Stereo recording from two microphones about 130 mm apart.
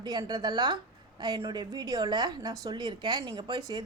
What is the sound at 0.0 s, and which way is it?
A woman's voice, 35° right (ahead or behind).